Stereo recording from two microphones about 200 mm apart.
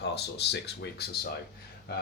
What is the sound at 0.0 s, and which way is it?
Speech, 55° left (ahead or behind).